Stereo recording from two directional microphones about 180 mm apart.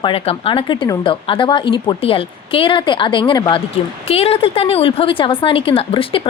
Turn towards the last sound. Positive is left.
turn(degrees=30)  # may be behind; listen again after turning